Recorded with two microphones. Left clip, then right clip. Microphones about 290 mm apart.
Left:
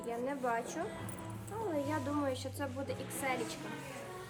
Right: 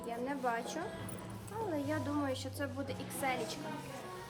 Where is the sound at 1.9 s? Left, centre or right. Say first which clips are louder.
Left 1 dB; centre.